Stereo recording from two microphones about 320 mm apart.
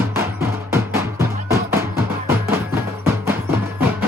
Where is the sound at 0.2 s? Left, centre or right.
Centre.